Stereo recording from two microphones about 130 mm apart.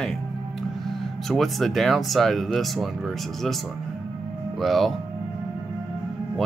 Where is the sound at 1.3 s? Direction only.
Centre (ahead or behind).